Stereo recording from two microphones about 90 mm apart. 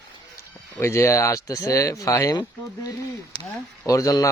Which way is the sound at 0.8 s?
30° left (ahead or behind).